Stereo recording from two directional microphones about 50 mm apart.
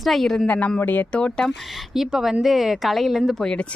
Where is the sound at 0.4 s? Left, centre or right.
Left.